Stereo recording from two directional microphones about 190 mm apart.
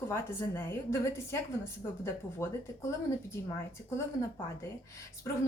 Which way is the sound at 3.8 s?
15° left (ahead or behind).